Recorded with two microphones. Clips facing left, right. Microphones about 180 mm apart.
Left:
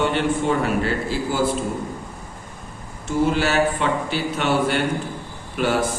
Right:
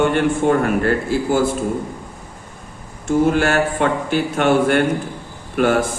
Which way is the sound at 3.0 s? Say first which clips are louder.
Right 4 dB; 50° right (ahead or behind).